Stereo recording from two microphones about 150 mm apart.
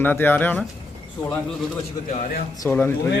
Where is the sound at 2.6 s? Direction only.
15° left (ahead or behind).